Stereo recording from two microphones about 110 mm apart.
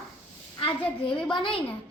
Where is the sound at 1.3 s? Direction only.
50° left (ahead or behind).